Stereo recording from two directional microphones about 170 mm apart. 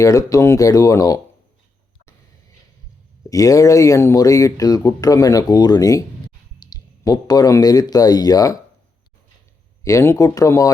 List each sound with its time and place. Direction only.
0.0 s speech: 20° left (ahead or behind)
3.2 s speech: 20° left (ahead or behind)
9.8 s speech: 15° left (ahead or behind)